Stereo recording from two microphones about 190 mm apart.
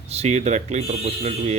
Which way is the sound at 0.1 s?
35° right (ahead or behind).